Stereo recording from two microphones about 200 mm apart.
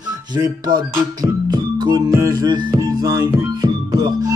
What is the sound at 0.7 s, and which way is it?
Music, 20° right (ahead or behind).